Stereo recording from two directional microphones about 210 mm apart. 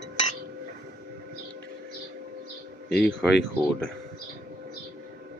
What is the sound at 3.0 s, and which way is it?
Speech, 5° left (ahead or behind).